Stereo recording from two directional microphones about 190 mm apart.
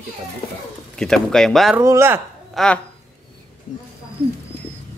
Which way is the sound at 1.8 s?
15° right (ahead or behind).